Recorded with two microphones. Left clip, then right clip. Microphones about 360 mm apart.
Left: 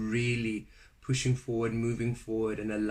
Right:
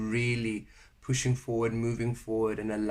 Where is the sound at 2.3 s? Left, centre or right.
Right.